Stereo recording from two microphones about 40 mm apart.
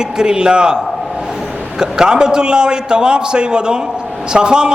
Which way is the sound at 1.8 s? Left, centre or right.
Centre.